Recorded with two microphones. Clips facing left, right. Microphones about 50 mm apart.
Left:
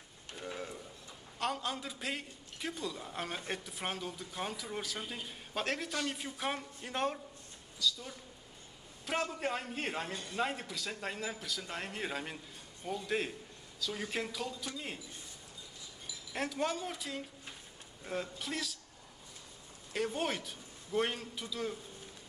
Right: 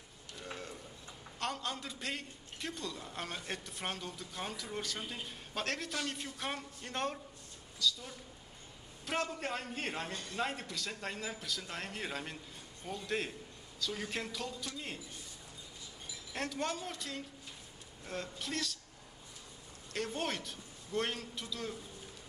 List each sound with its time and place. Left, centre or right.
0.5 s a sound: centre
1.4 s a man's voice: centre
16.3 s a man's voice: centre
19.9 s a man's voice: centre